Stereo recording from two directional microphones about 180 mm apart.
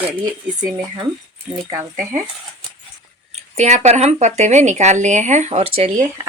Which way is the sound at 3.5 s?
40° right (ahead or behind).